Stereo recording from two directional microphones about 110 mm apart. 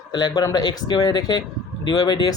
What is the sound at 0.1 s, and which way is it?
A man's voice, 40° left (ahead or behind).